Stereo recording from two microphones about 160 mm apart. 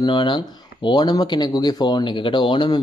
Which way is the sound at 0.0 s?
30° left (ahead or behind).